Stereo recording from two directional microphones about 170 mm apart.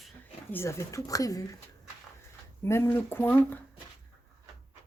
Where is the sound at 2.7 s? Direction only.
15° left (ahead or behind).